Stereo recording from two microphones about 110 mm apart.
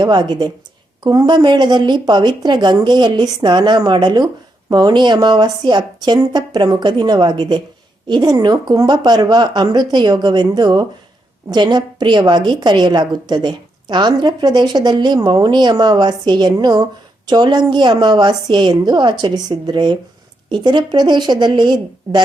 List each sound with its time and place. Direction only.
0.0 s a woman's voice: 40° right (ahead or behind)